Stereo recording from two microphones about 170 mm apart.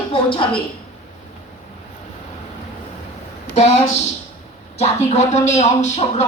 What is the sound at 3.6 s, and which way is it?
A man's voice, 40° left (ahead or behind).